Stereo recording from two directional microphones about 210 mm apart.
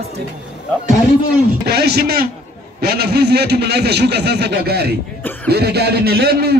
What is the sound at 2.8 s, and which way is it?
A man's voice, 50° right (ahead or behind).